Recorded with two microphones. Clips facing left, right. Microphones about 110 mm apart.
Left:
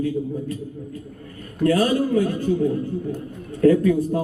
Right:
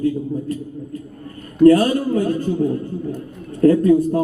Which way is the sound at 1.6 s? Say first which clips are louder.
Right 6 dB; 40° right (ahead or behind).